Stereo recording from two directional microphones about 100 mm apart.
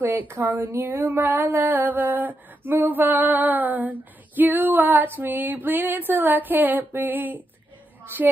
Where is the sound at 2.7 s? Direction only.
20° right (ahead or behind).